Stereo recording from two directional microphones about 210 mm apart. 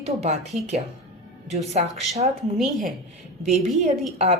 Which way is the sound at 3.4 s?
35° right (ahead or behind).